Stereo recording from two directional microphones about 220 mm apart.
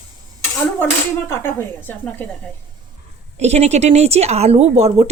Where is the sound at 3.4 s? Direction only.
30° right (ahead or behind).